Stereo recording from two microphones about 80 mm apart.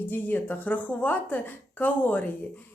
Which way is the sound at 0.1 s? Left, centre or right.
Left.